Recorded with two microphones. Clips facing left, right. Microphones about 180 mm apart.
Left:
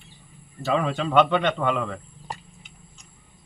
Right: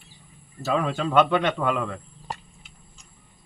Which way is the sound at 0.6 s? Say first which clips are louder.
Left 1 dB; centre (ahead or behind).